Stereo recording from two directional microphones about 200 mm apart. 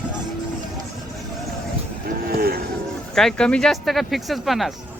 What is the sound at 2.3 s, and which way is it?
Cattle, 50° right (ahead or behind).